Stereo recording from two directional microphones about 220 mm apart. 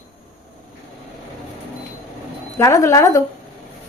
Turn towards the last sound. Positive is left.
turn(degrees=15)  # may be behind; listen again after turning